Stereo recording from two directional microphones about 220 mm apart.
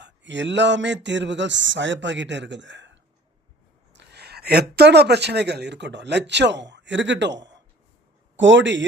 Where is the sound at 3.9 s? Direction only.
50° right (ahead or behind).